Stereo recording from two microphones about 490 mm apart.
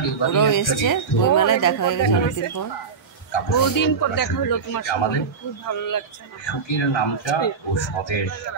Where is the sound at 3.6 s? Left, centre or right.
Left.